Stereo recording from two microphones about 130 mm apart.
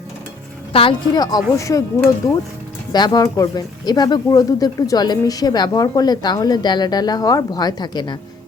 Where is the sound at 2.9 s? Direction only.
35° left (ahead or behind).